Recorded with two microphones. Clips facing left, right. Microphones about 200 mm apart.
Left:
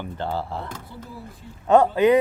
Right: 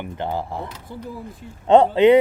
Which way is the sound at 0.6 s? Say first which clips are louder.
Right 2 dB; 50° left (ahead or behind).